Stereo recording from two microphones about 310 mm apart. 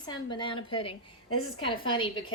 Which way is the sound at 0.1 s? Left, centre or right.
Centre.